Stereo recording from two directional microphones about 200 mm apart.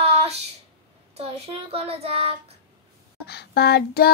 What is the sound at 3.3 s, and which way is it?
Child singing, 55° left (ahead or behind).